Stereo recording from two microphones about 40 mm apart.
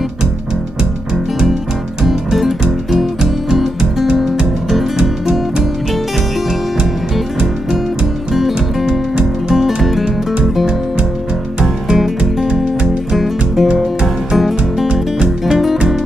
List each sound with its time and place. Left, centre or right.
2.0 s music: centre
5.0 s music: centre
8.4 s music: centre
14.9 s music: centre
15.5 s music: centre